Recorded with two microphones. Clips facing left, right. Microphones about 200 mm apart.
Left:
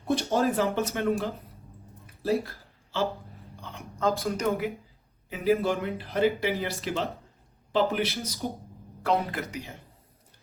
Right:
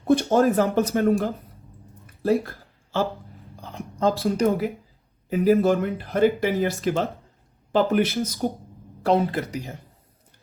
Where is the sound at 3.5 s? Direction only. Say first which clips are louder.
Right 4 dB; 35° right (ahead or behind).